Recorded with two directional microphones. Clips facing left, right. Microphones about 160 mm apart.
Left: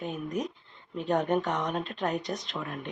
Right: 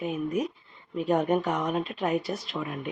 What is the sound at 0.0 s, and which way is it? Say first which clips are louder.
Speech: right 4 dB; 10° right (ahead or behind).